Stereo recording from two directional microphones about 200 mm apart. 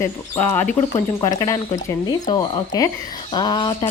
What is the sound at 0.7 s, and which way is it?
Speech, 20° left (ahead or behind).